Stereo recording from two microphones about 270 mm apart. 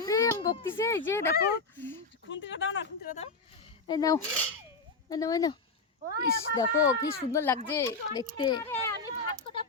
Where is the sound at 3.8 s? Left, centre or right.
Centre.